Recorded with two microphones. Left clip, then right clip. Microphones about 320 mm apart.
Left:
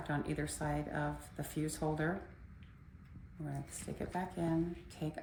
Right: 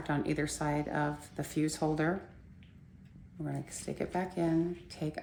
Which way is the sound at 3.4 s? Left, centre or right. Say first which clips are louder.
Right 6 dB; right.